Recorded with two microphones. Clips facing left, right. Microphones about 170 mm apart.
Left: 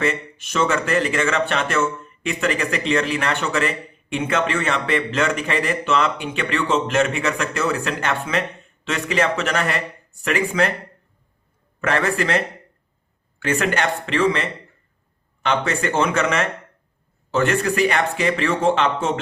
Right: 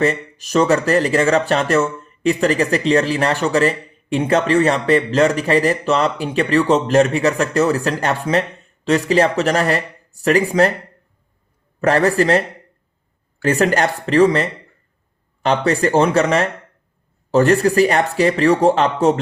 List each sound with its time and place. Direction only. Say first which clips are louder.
0.0 s speech: right 5 dB; 35° right (ahead or behind)
11.8 s speech: right 6 dB; 40° right (ahead or behind)
13.4 s speech: right 5 dB; 40° right (ahead or behind)
15.4 s speech: right 5 dB; 35° right (ahead or behind)